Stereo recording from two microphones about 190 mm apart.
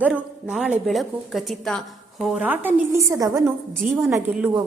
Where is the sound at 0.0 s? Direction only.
5° right (ahead or behind).